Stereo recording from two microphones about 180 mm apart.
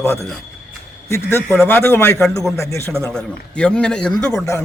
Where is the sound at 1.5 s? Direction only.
10° left (ahead or behind).